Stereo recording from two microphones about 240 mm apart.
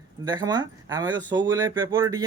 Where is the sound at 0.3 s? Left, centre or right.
Centre.